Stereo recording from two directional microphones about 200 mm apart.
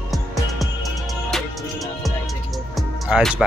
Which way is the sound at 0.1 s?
Centre (ahead or behind).